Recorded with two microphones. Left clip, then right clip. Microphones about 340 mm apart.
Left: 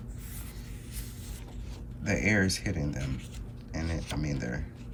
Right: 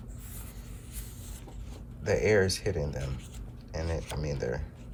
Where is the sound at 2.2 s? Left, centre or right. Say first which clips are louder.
Right 2 dB; centre.